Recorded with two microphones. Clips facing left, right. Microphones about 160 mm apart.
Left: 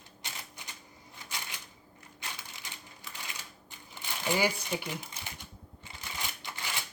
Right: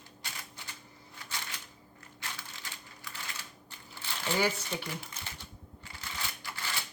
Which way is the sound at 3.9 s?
15° left (ahead or behind).